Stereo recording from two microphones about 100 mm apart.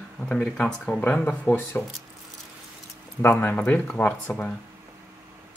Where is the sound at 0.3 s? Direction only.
10° left (ahead or behind).